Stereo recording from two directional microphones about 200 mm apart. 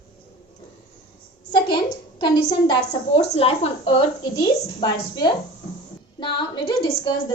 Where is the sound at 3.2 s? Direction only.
30° left (ahead or behind).